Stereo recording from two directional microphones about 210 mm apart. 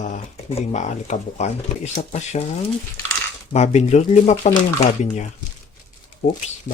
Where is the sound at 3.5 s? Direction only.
30° left (ahead or behind).